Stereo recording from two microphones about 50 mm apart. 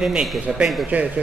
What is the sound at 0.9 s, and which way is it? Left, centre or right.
Speech, right.